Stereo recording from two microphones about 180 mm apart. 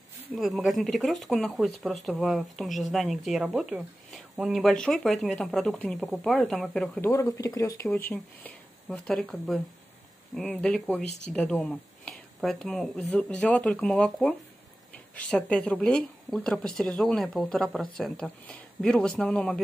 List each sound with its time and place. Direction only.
0.4 s speech: centre (ahead or behind)
7.0 s speech: 15° left (ahead or behind)
8.1 s speech: 5° left (ahead or behind)